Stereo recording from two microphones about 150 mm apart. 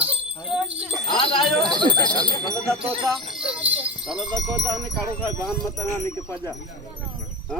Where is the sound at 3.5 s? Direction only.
10° right (ahead or behind).